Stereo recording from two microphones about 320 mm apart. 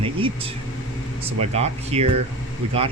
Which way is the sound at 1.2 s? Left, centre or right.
Centre.